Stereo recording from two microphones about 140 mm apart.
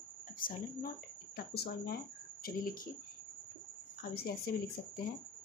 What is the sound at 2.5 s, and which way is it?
Speech, 90° left.